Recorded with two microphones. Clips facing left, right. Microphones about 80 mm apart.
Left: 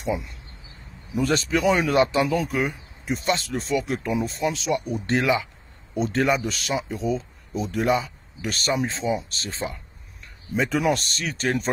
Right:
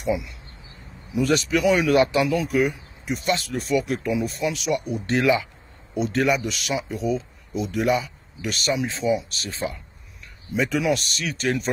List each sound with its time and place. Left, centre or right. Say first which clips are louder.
0.1 s speech: right 1 dB; left
5.9 s speech: even; left
6.9 s speech: right 3 dB; left
7.5 s speech: even; left
8.4 s speech: even; left
8.8 s speech: right 2 dB; left
10.7 s speech: left 1 dB; left